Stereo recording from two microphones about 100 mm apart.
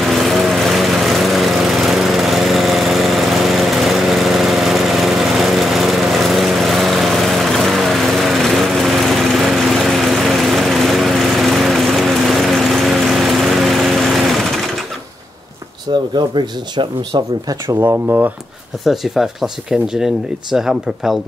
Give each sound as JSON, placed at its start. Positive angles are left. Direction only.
{"t": 0.0, "sound": "lawn mower", "side_deg": 0}
{"t": 15.9, "sound": "speech", "side_deg": -50}
{"t": 17.6, "sound": "speech", "side_deg": -25}
{"t": 18.9, "sound": "speech", "side_deg": -5}